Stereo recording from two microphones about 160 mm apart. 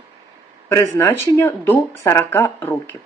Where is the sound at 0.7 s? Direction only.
15° left (ahead or behind).